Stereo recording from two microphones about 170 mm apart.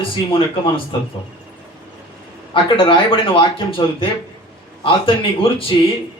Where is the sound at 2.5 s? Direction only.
30° left (ahead or behind).